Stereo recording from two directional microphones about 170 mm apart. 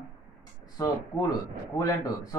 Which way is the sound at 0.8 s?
20° left (ahead or behind).